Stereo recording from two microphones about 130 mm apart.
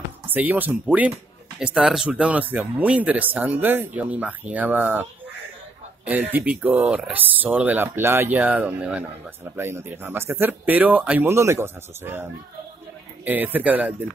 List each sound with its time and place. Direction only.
0.3 s speech: 15° right (ahead or behind)
6.0 s speech: 15° right (ahead or behind)